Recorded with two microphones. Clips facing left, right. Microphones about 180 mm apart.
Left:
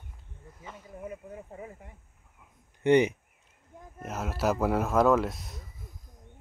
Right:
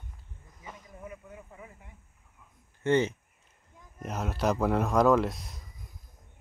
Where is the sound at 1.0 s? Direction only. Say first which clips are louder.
Left 6 dB; 35° left (ahead or behind).